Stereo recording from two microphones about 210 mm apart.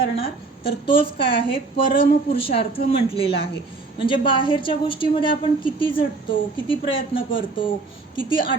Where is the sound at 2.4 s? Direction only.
30° left (ahead or behind).